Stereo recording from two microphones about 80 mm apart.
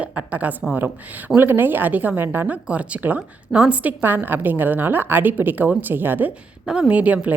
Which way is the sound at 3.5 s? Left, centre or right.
Centre.